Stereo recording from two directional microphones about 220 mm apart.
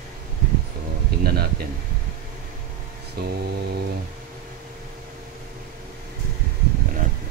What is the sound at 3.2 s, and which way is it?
Cutlery, 45° right (ahead or behind).